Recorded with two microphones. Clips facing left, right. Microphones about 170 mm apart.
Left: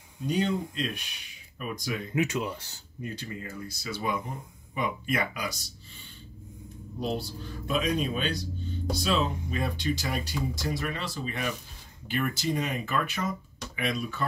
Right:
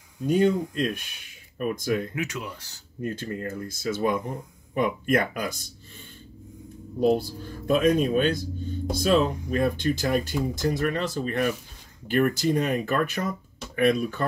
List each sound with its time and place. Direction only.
0.3 s speech: 50° right (ahead or behind)
2.1 s speech: 25° left (ahead or behind)
3.0 s speech: 50° right (ahead or behind)
7.0 s speech: 50° right (ahead or behind)